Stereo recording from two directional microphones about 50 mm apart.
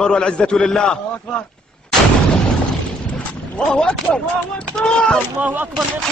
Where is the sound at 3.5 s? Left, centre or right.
Left.